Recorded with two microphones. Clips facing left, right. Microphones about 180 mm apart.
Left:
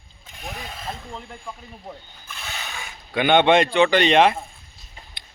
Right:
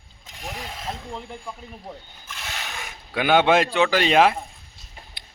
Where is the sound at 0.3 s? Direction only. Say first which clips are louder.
Even; 90° right.